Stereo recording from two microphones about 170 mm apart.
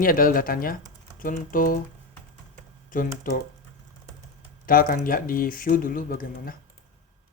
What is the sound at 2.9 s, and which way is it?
Speech, 55° left (ahead or behind).